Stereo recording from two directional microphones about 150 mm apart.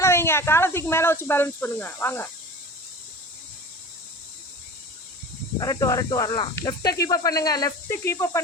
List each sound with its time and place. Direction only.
0.0 s speech: 15° left (ahead or behind)
5.5 s speech: 25° left (ahead or behind)